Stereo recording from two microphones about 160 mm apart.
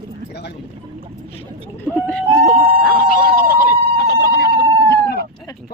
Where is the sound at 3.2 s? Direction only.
85° left.